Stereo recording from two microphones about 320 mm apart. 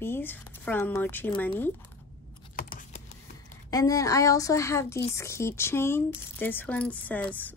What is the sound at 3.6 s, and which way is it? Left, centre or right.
A woman's voice, centre.